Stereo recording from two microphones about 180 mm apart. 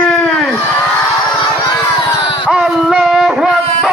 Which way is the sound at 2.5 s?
5° right (ahead or behind).